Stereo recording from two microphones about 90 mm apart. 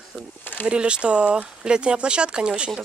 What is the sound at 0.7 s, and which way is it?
Speech, 10° right (ahead or behind).